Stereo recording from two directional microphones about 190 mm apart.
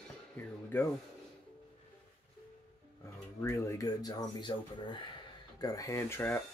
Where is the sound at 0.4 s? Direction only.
10° left (ahead or behind).